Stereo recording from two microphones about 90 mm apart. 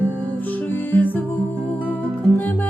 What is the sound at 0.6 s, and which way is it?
Music, 20° left (ahead or behind).